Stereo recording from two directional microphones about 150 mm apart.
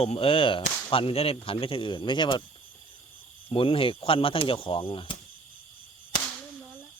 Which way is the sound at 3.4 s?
35° left (ahead or behind).